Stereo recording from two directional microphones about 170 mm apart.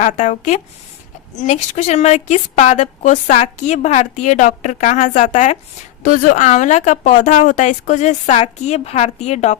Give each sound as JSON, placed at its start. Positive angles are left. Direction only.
{"t": 0.0, "sound": "a woman's voice", "side_deg": 45}